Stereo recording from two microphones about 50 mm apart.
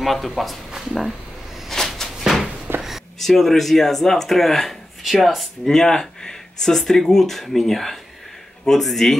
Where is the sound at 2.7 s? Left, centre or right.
Right.